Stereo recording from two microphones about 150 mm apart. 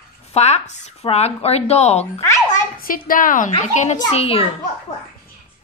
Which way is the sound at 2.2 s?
20° left (ahead or behind).